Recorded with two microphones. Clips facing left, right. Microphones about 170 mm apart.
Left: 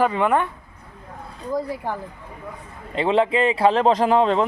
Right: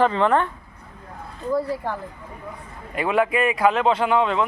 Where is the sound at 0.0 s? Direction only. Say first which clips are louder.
Right 1 dB; 10° left (ahead or behind).